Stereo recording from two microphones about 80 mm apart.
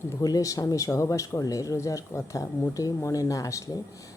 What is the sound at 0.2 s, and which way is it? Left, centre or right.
Speech, left.